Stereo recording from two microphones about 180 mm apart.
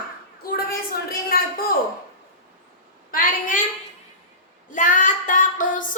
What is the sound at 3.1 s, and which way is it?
Child singing, 50° left (ahead or behind).